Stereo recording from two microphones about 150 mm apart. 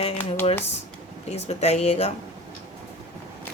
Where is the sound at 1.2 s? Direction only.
45° left (ahead or behind).